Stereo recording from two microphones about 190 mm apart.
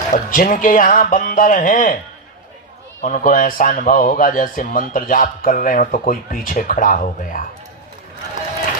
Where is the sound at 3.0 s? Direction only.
40° left (ahead or behind).